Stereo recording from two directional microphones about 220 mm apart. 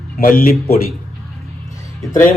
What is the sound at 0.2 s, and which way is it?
Speech, 40° left (ahead or behind).